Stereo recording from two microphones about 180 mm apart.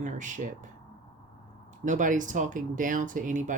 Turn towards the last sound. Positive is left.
turn(degrees=-45)  # may be behind; listen again after turning